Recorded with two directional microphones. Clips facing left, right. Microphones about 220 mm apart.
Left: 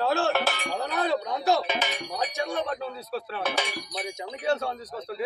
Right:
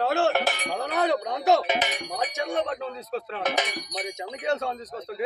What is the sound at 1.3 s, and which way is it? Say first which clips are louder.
Speech: right 3 dB; 20° right (ahead or behind).